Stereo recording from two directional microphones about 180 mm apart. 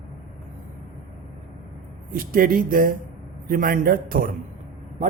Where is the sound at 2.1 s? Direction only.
55° right (ahead or behind).